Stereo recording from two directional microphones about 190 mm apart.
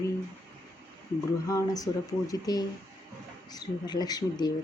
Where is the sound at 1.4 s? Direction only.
15° left (ahead or behind).